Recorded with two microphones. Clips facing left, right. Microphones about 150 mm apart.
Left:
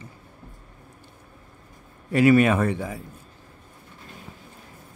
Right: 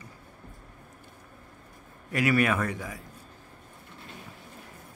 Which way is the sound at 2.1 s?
25° left (ahead or behind).